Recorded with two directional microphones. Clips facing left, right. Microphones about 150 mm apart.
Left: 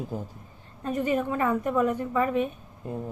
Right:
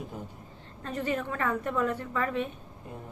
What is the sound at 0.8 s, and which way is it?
A woman's voice, 15° left (ahead or behind).